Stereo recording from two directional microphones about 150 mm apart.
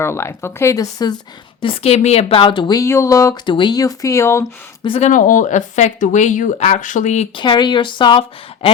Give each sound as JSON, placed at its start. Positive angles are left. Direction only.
{"t": 0.0, "sound": "speech", "side_deg": 15}
{"t": 1.6, "sound": "speech", "side_deg": 40}
{"t": 3.4, "sound": "speech", "side_deg": 30}
{"t": 4.9, "sound": "speech", "side_deg": 55}
{"t": 7.3, "sound": "speech", "side_deg": 30}